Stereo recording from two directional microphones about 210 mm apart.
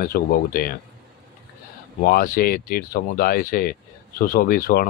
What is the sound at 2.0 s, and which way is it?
Speech, 45° left (ahead or behind).